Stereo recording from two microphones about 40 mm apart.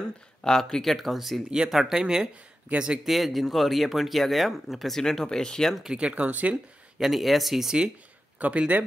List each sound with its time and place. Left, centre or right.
0.4 s speech: centre
0.9 s speech: centre
1.5 s speech: centre
2.7 s a man's voice: right
3.1 s speech: centre
4.9 s speech: centre
5.9 s speech: right
6.2 s a man's voice: right
7.0 s speech: centre
8.4 s a man's voice: right